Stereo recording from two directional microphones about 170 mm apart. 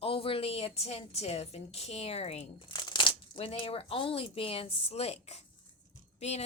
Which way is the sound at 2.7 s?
25° left (ahead or behind).